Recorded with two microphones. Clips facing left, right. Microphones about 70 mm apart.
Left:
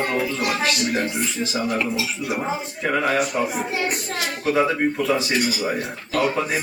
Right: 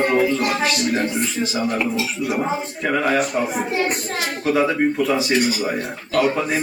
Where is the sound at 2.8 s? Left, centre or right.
Centre.